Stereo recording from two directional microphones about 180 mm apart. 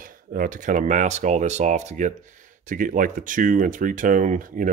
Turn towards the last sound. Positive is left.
turn(degrees=-50)  # may be behind; listen again after turning